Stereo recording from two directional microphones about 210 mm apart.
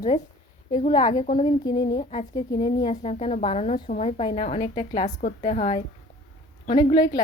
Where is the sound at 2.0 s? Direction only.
30° left (ahead or behind).